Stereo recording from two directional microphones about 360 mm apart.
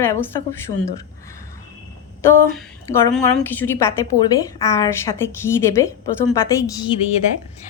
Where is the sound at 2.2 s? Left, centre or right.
Centre.